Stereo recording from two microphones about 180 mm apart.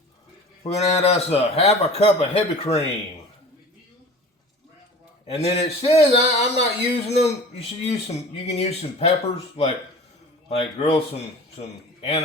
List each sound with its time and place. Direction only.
0.7 s speech: 35° left (ahead or behind)
5.2 s speech: 35° left (ahead or behind)